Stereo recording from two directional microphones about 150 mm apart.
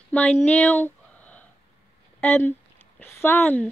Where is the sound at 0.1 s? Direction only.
5° left (ahead or behind).